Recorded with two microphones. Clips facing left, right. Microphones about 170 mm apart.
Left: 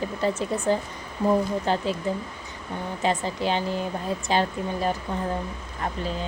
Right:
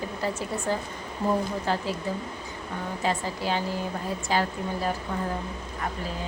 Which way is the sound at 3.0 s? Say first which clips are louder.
Left 3 dB; 20° left (ahead or behind).